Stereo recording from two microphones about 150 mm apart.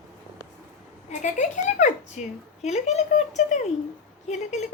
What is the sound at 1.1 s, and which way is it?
Speech, 55° left (ahead or behind).